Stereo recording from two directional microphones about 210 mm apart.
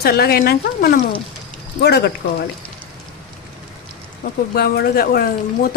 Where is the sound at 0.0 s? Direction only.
50° left (ahead or behind).